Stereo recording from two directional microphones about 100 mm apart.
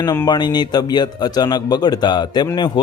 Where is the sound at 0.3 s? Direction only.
45° left (ahead or behind).